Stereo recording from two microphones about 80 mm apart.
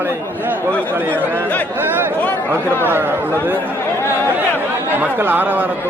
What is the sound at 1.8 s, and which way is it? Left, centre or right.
Chatter, right.